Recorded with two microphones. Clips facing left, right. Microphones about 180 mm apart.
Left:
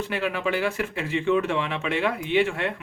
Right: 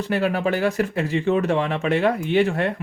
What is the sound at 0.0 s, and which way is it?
Speech, 40° right (ahead or behind).